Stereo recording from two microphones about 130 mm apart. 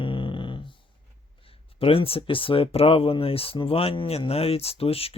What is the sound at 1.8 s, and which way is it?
Speech, 45° left (ahead or behind).